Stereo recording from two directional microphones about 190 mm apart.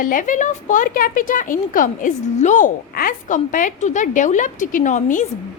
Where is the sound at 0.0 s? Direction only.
45° left (ahead or behind).